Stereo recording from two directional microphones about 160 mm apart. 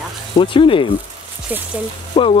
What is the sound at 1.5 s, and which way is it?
Speech, 10° right (ahead or behind).